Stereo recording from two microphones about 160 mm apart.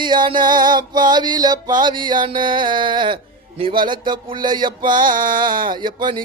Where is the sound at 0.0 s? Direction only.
30° right (ahead or behind).